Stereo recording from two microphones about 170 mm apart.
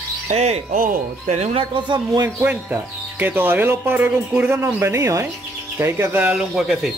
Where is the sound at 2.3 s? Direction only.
10° right (ahead or behind).